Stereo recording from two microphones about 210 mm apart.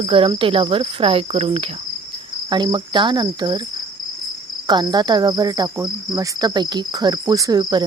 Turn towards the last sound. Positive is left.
turn(degrees=-20)  # may be behind; listen again after turning